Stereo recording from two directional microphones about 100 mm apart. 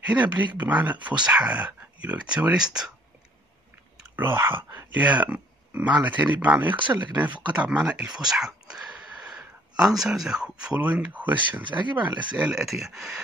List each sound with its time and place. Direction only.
0.0 s speech: 15° right (ahead or behind)
4.2 s speech: 20° right (ahead or behind); by 13.2 s 5° right (ahead or behind)